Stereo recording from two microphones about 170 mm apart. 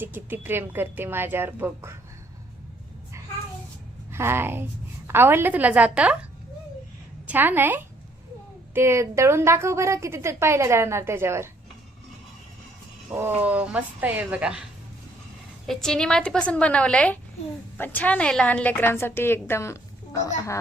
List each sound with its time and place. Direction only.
0.0 s a woman's voice: 10° right (ahead or behind)
4.1 s a woman's voice: 15° right (ahead or behind)
7.3 s a woman's voice: 10° right (ahead or behind)
13.1 s a woman's voice: 15° right (ahead or behind)
15.6 s a woman's voice: centre (ahead or behind); by 20.3 s 20° left (ahead or behind)